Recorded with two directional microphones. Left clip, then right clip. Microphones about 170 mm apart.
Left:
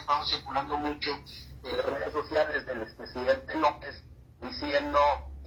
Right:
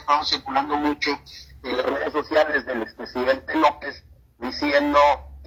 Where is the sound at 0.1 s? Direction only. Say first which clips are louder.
Right 8 dB; 40° right (ahead or behind).